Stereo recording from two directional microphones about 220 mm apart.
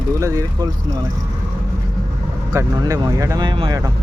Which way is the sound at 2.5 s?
15° right (ahead or behind).